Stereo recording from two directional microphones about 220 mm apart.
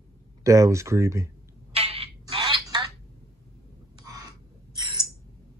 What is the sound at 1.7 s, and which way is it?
Telephone, 25° right (ahead or behind).